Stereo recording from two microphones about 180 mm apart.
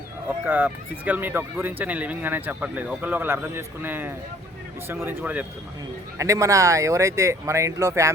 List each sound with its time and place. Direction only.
0.4 s speech: 10° right (ahead or behind)